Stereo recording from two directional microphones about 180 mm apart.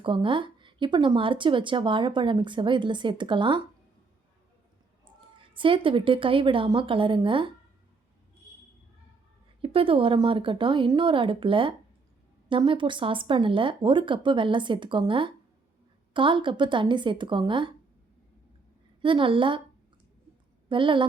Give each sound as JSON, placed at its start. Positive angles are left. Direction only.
{"t": 0.0, "sound": "a woman's voice", "side_deg": -30}
{"t": 5.5, "sound": "a woman's voice", "side_deg": -30}
{"t": 9.6, "sound": "a woman's voice", "side_deg": -30}
{"t": 19.0, "sound": "a woman's voice", "side_deg": -30}
{"t": 20.7, "sound": "a woman's voice", "side_deg": -25}